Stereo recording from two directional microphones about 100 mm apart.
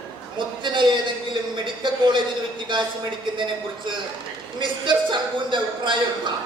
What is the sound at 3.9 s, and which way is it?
A man's voice, 55° right (ahead or behind).